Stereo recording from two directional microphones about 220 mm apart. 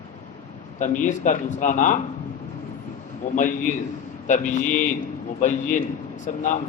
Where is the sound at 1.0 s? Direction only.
35° left (ahead or behind).